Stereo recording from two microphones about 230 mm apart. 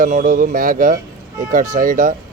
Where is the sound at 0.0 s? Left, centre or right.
Right.